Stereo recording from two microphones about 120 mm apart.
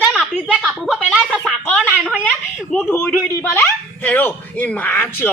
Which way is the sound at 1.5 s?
10° left (ahead or behind).